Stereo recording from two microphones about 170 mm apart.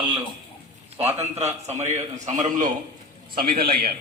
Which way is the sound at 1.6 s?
40° right (ahead or behind).